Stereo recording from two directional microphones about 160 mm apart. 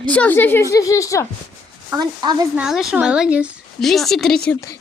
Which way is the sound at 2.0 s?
25° right (ahead or behind).